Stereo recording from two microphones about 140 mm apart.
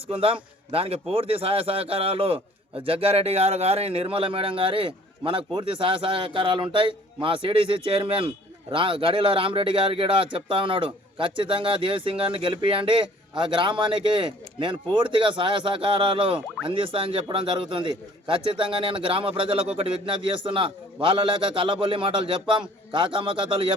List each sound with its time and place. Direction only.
0.1 s a man's voice: 40° right (ahead or behind)